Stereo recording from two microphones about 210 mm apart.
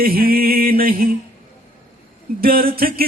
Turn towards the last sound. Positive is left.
turn(degrees=-45)  # may be behind; listen again after turning